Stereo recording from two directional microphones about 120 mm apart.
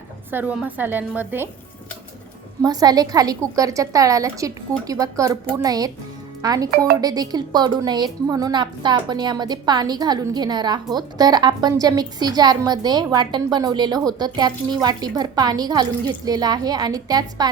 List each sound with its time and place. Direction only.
0.3 s a woman's voice: 15° right (ahead or behind)
2.6 s a woman's voice: 30° right (ahead or behind)